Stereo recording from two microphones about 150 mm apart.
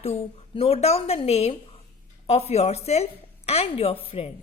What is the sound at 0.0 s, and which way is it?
A woman's voice, 40° left (ahead or behind).